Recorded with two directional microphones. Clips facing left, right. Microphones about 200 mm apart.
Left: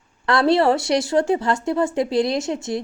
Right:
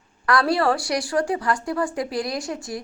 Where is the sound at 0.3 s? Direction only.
25° left (ahead or behind).